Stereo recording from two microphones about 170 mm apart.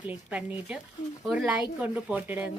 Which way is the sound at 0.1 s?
10° right (ahead or behind).